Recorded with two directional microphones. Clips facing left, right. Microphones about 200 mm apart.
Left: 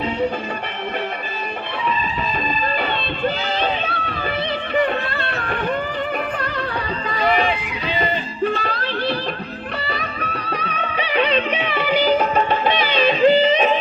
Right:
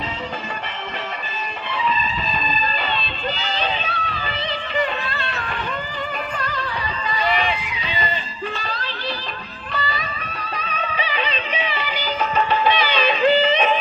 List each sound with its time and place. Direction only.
2.5 s music: 55° left (ahead or behind)
7.1 s a sound: 55° left (ahead or behind)
7.5 s music: 55° left (ahead or behind); by 13.7 s 40° left (ahead or behind)